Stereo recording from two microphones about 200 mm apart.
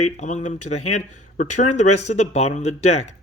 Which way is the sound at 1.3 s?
45° left (ahead or behind).